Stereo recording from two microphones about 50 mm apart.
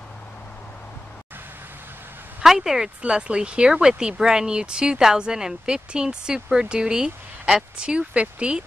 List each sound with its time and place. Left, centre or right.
2.4 s speech: centre
3.0 s speech: right